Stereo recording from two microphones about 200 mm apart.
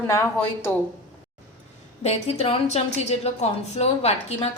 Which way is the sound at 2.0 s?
30° left (ahead or behind).